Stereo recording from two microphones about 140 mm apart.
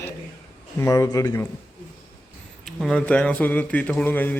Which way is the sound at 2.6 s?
5° left (ahead or behind).